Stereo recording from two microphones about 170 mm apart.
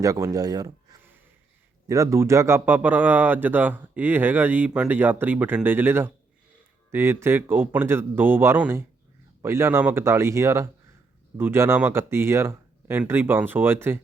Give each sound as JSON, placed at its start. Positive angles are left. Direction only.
{"t": 0.0, "sound": "speech", "side_deg": -20}
{"t": 1.9, "sound": "speech", "side_deg": -15}